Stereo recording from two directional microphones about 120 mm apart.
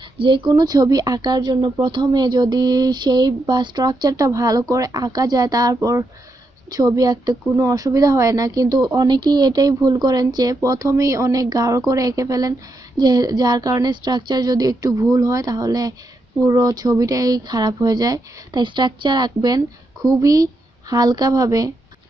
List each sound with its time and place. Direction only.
0.2 s a child's voice: 40° right (ahead or behind)